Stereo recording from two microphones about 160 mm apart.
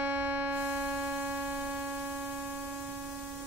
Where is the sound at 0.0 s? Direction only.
10° right (ahead or behind).